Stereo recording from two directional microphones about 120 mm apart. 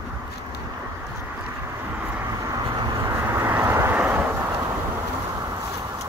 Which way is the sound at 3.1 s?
20° right (ahead or behind).